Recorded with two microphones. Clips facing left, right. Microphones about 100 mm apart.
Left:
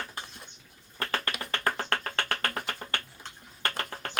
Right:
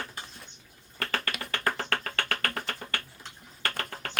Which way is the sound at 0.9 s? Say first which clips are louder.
Even; 25° left (ahead or behind).